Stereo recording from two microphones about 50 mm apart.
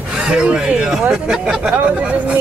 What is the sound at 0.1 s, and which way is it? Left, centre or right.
Speech, centre.